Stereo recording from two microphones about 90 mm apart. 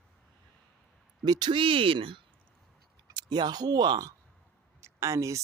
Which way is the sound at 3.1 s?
55° right (ahead or behind).